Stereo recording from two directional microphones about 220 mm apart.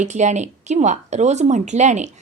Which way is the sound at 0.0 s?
30° right (ahead or behind).